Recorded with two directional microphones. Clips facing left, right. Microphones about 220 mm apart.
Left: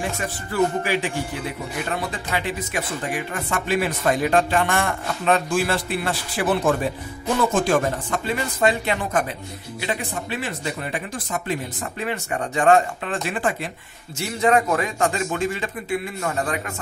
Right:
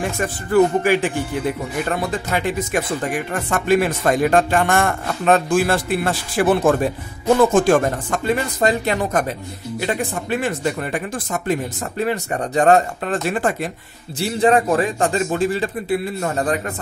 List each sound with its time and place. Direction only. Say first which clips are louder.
0.2 s speech: right 8 dB; 50° right (ahead or behind)
2.3 s speech: right 5 dB; 45° right (ahead or behind)
12.0 s speech: right 5 dB; 35° right (ahead or behind)
14.2 s speech: right 3 dB; 30° right (ahead or behind)